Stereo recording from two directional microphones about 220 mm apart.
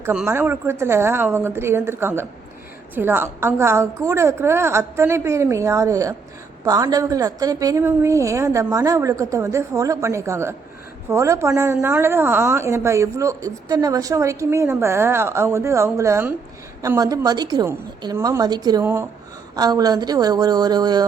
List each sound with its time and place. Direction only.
0.0 s a woman's voice: 5° right (ahead or behind)